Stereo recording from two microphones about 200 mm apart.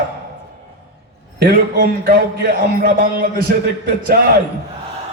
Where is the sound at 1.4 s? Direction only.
50° right (ahead or behind).